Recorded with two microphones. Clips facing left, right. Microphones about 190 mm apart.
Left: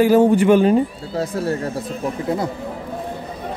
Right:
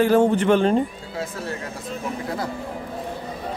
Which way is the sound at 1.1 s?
40° left (ahead or behind).